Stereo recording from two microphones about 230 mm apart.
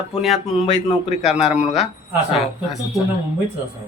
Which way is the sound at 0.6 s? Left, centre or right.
Left.